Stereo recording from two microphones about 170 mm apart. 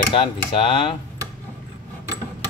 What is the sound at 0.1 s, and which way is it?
Speech, 30° left (ahead or behind).